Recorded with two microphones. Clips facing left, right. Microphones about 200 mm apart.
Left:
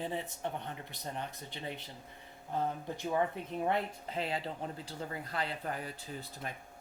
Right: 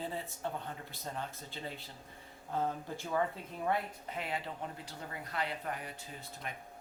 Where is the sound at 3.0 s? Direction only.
20° left (ahead or behind).